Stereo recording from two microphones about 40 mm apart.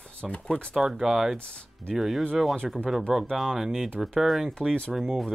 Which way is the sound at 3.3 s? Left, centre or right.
Centre.